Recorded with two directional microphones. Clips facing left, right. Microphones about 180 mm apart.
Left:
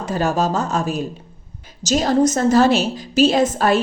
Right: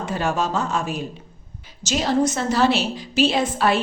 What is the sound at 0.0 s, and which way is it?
A woman's voice, 40° left (ahead or behind).